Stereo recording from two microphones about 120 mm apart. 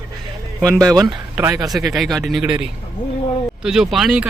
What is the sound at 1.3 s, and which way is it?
Speech, 25° right (ahead or behind).